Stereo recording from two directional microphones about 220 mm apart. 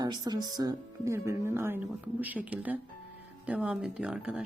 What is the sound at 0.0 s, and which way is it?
Speech, 20° right (ahead or behind).